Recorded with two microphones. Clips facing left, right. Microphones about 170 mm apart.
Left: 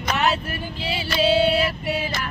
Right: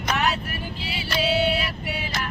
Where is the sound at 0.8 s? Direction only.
25° left (ahead or behind).